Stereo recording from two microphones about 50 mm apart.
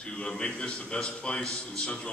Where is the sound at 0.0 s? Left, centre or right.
Left.